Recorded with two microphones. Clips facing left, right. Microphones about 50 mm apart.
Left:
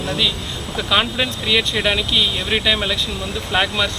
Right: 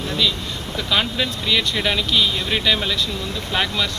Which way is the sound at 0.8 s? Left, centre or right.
Centre.